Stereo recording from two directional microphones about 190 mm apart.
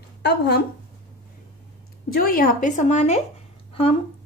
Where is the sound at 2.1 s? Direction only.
50° left (ahead or behind).